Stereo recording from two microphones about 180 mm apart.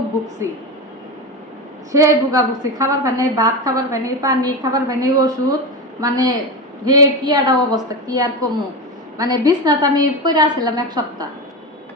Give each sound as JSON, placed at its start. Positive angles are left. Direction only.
{"t": 1.9, "sound": "a woman's voice", "side_deg": -20}